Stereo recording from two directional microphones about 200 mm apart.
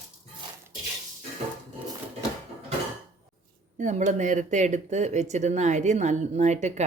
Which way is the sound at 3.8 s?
40° right (ahead or behind).